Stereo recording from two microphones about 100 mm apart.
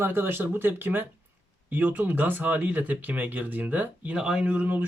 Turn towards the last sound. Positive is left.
turn(degrees=-15)  # may be behind; listen again after turning